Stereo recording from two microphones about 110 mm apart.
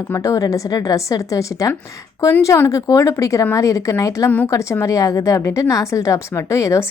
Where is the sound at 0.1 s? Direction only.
30° left (ahead or behind).